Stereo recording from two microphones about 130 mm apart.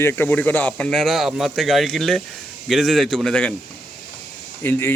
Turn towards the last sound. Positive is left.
turn(degrees=15)  # may be behind; listen again after turning